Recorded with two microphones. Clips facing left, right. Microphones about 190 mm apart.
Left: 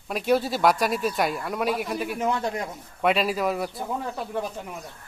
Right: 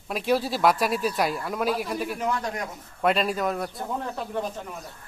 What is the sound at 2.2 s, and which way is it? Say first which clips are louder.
Speech: left 2 dB; 25° left (ahead or behind).